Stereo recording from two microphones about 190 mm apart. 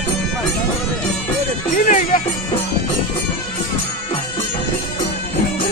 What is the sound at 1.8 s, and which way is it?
Music, 40° left (ahead or behind).